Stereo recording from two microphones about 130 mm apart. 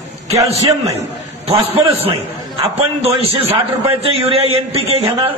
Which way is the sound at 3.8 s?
45° right (ahead or behind).